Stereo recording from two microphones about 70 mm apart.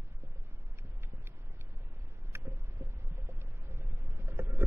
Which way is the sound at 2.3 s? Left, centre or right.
Right.